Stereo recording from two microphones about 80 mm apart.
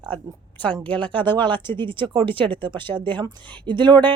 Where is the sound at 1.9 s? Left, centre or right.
Right.